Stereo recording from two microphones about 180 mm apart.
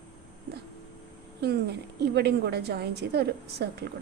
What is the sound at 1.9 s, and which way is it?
A woman's voice, 65° right (ahead or behind).